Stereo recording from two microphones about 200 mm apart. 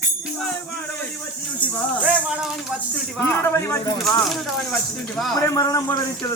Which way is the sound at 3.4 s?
15° left (ahead or behind).